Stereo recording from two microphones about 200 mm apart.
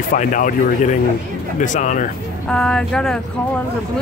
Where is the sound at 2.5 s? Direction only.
5° left (ahead or behind).